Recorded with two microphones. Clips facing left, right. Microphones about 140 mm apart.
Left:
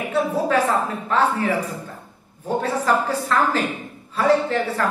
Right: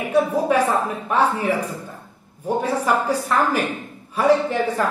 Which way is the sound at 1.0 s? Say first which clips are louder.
Right 1 dB; 15° right (ahead or behind).